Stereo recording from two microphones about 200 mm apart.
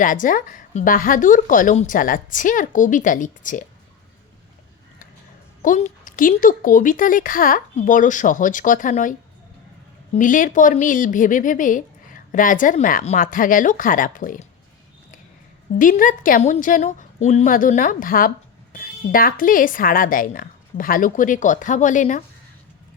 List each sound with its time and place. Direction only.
0.0 s a woman's voice: 40° left (ahead or behind)
5.6 s a woman's voice: 40° left (ahead or behind)
10.2 s a woman's voice: 40° left (ahead or behind)
15.8 s a woman's voice: 40° left (ahead or behind)